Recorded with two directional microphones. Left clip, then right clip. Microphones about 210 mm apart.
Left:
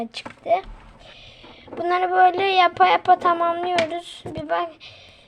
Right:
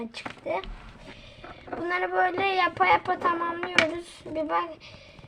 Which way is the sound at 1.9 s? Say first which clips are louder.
Left 8 dB; 35° left (ahead or behind).